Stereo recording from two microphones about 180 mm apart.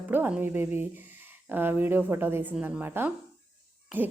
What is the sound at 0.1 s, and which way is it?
A woman's voice, 10° right (ahead or behind).